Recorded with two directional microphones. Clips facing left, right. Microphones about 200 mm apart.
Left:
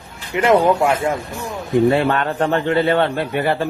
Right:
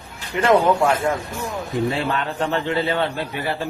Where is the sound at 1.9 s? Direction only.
60° left (ahead or behind).